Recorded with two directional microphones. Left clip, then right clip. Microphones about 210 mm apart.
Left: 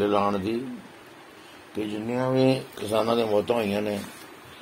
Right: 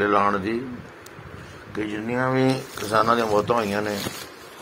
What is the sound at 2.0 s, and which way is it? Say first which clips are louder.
A man's voice: right 1 dB; centre (ahead or behind).